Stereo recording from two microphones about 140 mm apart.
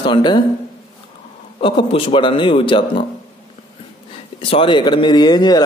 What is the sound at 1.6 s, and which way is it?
A man's voice, 40° left (ahead or behind).